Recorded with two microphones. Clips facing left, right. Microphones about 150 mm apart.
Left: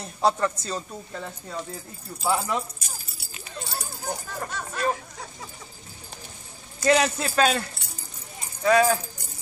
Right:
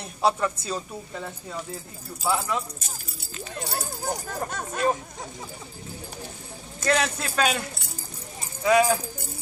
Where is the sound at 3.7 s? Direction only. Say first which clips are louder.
Right 2 dB; 50° right (ahead or behind).